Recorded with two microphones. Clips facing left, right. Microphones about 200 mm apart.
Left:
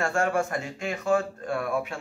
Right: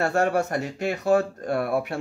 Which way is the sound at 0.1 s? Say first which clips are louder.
Right 3 dB; 40° right (ahead or behind).